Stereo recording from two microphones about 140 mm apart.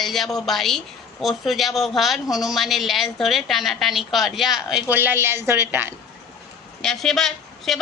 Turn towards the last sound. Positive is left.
turn(degrees=0)  # may be behind; listen again after turning